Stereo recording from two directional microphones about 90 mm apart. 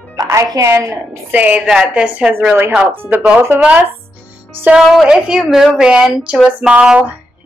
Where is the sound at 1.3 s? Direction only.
15° right (ahead or behind).